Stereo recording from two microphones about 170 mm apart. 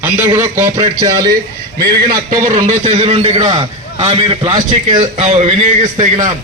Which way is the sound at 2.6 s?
45° right (ahead or behind).